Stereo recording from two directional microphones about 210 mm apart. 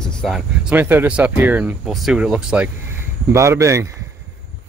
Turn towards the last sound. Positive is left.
turn(degrees=-15)  # may be behind; listen again after turning